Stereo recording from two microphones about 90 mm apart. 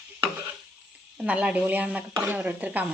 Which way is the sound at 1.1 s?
15° right (ahead or behind).